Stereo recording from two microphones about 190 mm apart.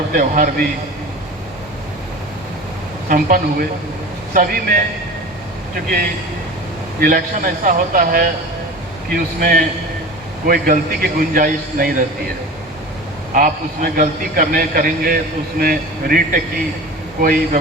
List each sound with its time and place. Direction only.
0.1 s a man's voice: 45° right (ahead or behind)
3.1 s a man's voice: 45° right (ahead or behind)
7.0 s a man's voice: 45° right (ahead or behind)
13.3 s a man's voice: 45° right (ahead or behind)